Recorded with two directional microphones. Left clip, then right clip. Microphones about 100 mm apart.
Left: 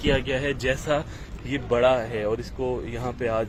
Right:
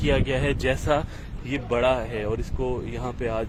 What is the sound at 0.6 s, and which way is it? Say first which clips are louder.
Speech: right 1 dB; 50° right (ahead or behind).